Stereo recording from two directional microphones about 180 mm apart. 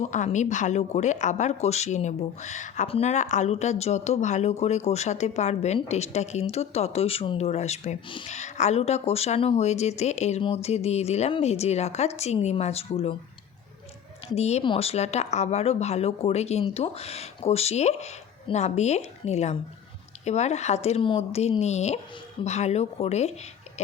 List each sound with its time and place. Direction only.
0.0 s a woman's voice: 35° left (ahead or behind)
14.3 s a woman's voice: 35° left (ahead or behind)